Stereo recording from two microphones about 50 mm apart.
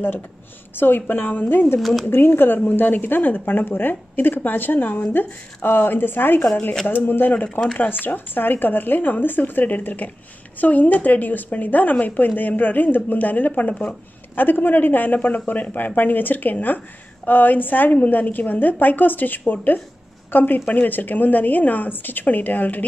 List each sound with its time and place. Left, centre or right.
0.7 s speech: left
1.8 s speech: centre
2.0 s speech: left